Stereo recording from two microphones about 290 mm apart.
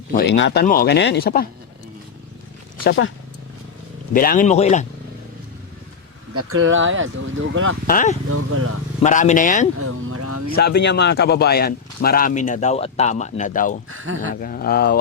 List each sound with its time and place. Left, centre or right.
0.1 s speech: left
2.8 s speech: left
4.1 s speech: left
6.3 s speech: right
7.9 s speech: left
8.3 s speech: right
9.0 s speech: left
9.7 s speech: right
10.5 s speech: left
13.9 s speech: right
14.4 s speech: left